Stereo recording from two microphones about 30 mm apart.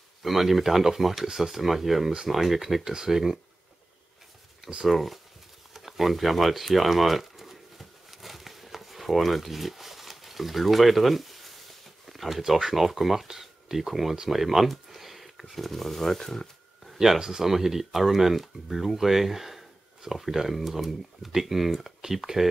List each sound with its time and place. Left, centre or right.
0.2 s speech: centre
2.8 s speech: centre
4.8 s speech: centre
5.7 s a sound: centre
12.1 s speech: centre
14.3 s a sound: centre
15.5 s speech: centre
17.2 s speech: centre